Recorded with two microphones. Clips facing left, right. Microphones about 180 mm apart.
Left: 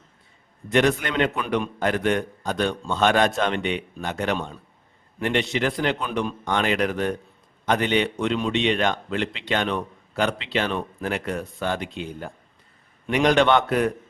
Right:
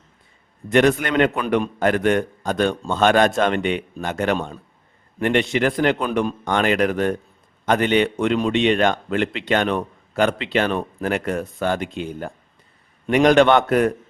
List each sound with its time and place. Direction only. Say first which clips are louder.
0.7 s a man's voice: right 4 dB; 50° right (ahead or behind)